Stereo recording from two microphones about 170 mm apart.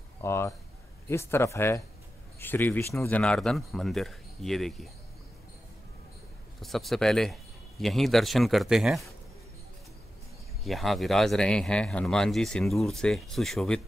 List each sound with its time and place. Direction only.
0.2 s a man's voice: 15° left (ahead or behind)
6.6 s speech: centre (ahead or behind)
10.6 s speech: centre (ahead or behind)